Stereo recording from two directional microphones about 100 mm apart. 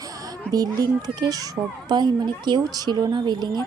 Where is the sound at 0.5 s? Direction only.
40° right (ahead or behind).